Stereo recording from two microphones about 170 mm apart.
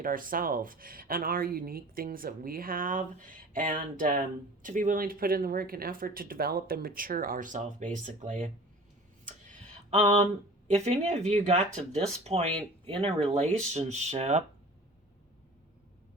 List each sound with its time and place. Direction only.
0.0 s speech: 55° right (ahead or behind)
9.2 s a sound: 45° right (ahead or behind)
10.7 s speech: 40° right (ahead or behind)
13.3 s speech: 45° right (ahead or behind)